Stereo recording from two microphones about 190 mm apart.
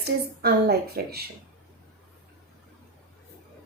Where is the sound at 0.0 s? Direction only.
55° right (ahead or behind).